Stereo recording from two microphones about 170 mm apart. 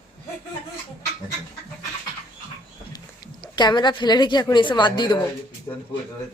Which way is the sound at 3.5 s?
25° left (ahead or behind).